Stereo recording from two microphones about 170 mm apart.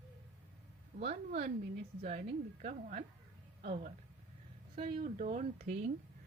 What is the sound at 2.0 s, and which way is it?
A woman's voice, 45° right (ahead or behind).